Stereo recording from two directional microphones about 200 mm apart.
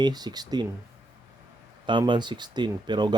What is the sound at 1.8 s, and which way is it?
Speech, 25° right (ahead or behind).